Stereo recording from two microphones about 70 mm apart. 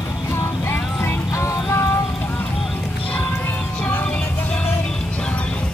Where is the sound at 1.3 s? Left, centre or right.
Left.